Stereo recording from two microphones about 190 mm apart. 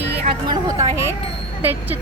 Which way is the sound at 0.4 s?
20° right (ahead or behind).